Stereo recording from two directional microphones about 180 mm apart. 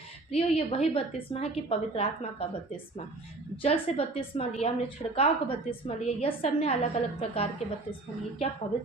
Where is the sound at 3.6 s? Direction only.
30° left (ahead or behind).